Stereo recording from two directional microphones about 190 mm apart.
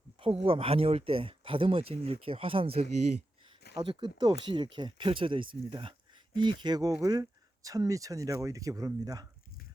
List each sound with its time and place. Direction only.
0.2 s speech: 30° right (ahead or behind)